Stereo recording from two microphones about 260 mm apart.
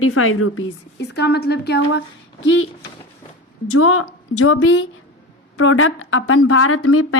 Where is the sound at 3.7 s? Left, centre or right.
Left.